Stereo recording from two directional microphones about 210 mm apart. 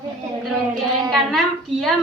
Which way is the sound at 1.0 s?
Centre (ahead or behind).